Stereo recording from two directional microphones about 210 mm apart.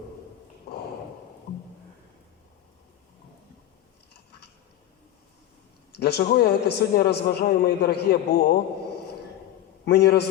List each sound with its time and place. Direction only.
6.0 s a man's voice: 50° left (ahead or behind)
9.8 s a man's voice: 50° left (ahead or behind)